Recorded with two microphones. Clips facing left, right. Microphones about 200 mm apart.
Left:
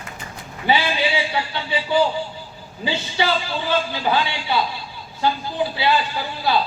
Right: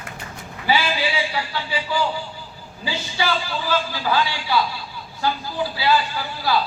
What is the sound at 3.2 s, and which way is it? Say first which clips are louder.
A man's voice: left 1 dB; 25° left (ahead or behind).